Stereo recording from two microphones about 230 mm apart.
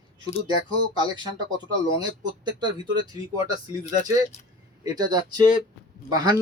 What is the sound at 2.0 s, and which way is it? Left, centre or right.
Speech, centre.